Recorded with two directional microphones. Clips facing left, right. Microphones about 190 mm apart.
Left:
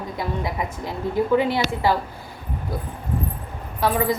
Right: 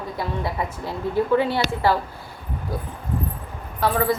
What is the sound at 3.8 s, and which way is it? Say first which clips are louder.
Speech: even; 15° left (ahead or behind).